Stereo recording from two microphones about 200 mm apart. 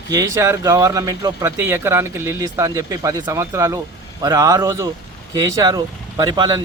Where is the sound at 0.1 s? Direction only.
15° right (ahead or behind).